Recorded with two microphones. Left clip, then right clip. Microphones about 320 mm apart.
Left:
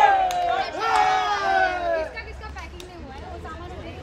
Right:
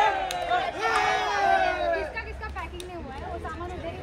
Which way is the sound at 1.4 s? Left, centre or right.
Centre.